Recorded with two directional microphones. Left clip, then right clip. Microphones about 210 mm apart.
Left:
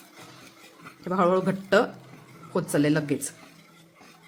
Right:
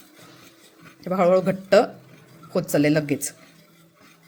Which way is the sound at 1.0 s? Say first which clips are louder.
Right 4 dB; 5° right (ahead or behind).